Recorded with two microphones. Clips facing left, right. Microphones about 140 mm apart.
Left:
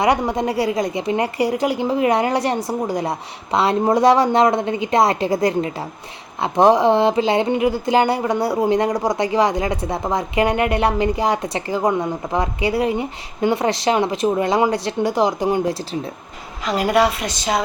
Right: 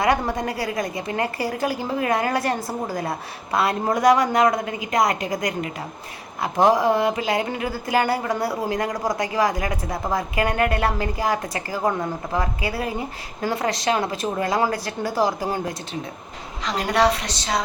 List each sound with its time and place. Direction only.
0.0 s a woman's voice: 25° left (ahead or behind)
2.6 s a woman's voice: centre (ahead or behind)
2.9 s a woman's voice: 25° left (ahead or behind)
16.6 s a woman's voice: 5° left (ahead or behind)